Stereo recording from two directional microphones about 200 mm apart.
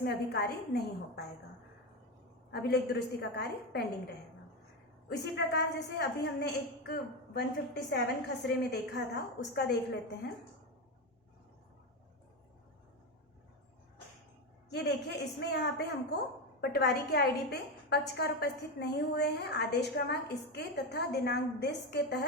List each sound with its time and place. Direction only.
0.0 s a woman's voice: 55° left (ahead or behind)
2.5 s a woman's voice: 55° left (ahead or behind)
5.0 s a woman's voice: 55° left (ahead or behind)
14.7 s a woman's voice: 55° left (ahead or behind)